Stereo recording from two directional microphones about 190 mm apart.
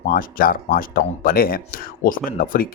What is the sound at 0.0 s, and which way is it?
Speech, 50° left (ahead or behind).